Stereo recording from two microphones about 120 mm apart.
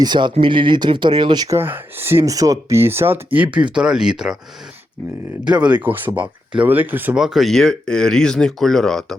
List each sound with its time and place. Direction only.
0.0 s speech: 40° right (ahead or behind)
1.5 s speech: 20° right (ahead or behind)
5.5 s speech: 10° right (ahead or behind)
7.2 s speech: 5° right (ahead or behind)